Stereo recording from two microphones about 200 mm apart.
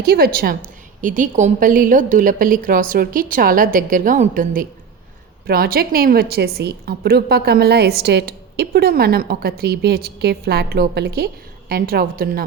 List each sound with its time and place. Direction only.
0.0 s a woman's voice: 50° right (ahead or behind)